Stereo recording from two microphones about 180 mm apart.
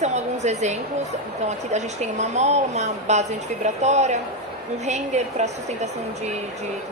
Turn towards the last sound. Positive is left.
turn(degrees=-40)  # may be behind; listen again after turning